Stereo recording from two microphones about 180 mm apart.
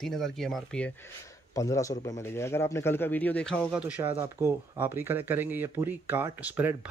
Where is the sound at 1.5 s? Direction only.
20° left (ahead or behind).